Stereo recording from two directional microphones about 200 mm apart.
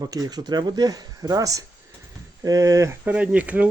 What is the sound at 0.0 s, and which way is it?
Speech, 20° right (ahead or behind).